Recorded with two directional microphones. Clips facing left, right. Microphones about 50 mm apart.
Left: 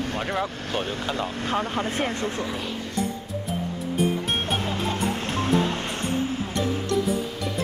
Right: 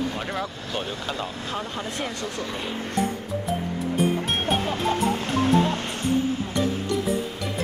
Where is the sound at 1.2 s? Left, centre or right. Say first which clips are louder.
Left 4 dB; left.